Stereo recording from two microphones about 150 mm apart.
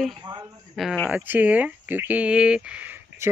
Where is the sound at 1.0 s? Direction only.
10° right (ahead or behind).